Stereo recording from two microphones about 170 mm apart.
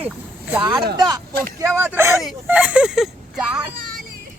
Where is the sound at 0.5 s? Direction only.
20° right (ahead or behind).